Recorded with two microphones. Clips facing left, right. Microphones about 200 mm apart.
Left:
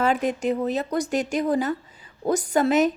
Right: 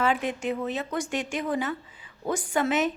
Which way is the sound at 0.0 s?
40° left (ahead or behind).